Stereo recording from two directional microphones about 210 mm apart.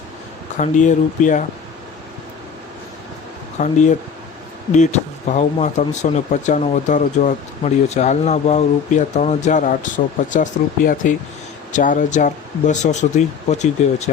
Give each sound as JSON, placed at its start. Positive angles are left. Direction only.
{"t": 0.5, "sound": "speech", "side_deg": 35}
{"t": 3.6, "sound": "speech", "side_deg": 35}